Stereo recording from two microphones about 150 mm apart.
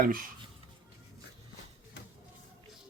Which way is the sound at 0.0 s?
70° right (ahead or behind).